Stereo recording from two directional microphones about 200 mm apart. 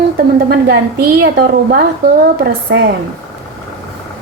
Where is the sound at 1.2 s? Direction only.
50° right (ahead or behind).